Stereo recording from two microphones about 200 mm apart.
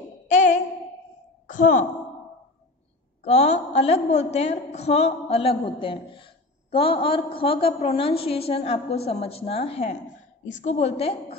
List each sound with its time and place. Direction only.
0.3 s a sound: 40° left (ahead or behind)
1.5 s a woman's voice: 40° left (ahead or behind)
3.3 s a woman's voice: 35° left (ahead or behind)